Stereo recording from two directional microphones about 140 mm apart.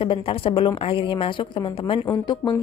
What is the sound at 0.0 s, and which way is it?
A woman's voice, 40° left (ahead or behind).